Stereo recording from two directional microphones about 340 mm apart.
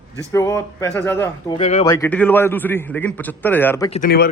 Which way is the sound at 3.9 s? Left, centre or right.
Left.